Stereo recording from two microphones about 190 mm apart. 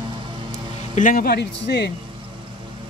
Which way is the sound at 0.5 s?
40° left (ahead or behind).